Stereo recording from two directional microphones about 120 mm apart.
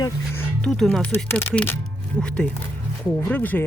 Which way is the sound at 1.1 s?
20° left (ahead or behind).